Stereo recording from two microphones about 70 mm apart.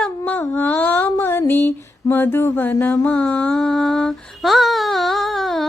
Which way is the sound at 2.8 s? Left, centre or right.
Centre.